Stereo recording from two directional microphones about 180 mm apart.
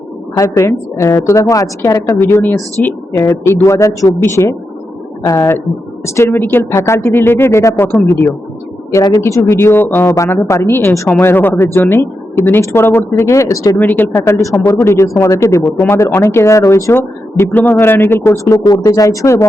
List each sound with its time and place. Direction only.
0.3 s speech: 15° left (ahead or behind)